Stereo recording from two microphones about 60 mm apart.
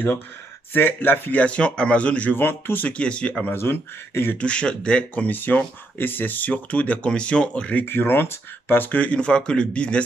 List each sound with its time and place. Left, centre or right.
0.7 s speech: left
1.4 s speech: left
2.3 s speech: left
2.9 s speech: centre
3.5 s speech: left
4.4 s speech: centre
7.8 s speech: left; by 10.0 s centre